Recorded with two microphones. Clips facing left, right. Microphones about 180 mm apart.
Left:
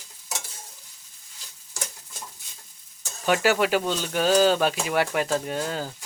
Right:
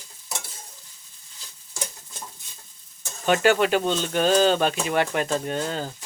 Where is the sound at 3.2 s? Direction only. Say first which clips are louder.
Right 2 dB; 5° left (ahead or behind).